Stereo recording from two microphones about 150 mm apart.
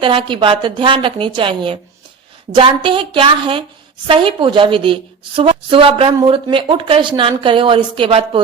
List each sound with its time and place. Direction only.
0.0 s a woman's voice: 35° right (ahead or behind)